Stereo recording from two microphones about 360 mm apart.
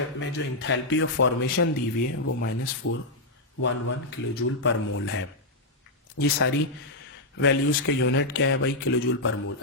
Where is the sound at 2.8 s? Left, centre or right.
Left.